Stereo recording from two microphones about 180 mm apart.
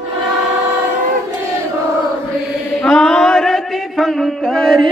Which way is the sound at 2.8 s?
5° left (ahead or behind).